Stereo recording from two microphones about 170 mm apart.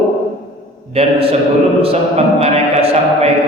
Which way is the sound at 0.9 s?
35° right (ahead or behind).